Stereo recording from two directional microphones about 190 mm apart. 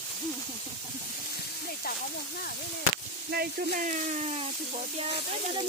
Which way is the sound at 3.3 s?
55° right (ahead or behind).